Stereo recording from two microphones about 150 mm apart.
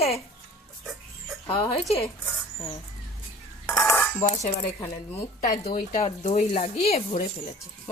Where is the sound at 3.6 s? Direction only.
20° left (ahead or behind).